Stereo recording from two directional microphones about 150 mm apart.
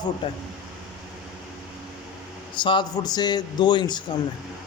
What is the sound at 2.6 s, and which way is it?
A man's voice, 30° left (ahead or behind).